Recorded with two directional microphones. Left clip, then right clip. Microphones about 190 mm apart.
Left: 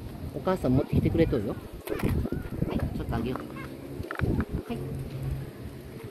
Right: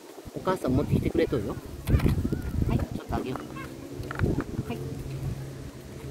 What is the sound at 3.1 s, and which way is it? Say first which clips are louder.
Speech: right 2 dB; centre (ahead or behind).